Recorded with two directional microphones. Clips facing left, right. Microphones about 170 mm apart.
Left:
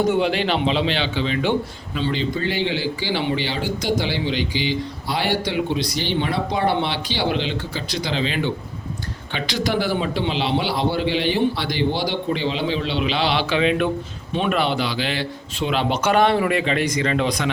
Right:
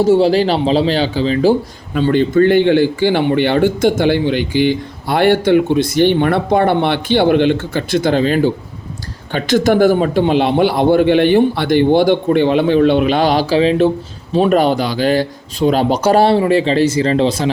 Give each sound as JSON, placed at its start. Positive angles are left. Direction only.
{"t": 0.0, "sound": "a man's voice", "side_deg": -30}
{"t": 1.9, "sound": "a man's voice", "side_deg": -50}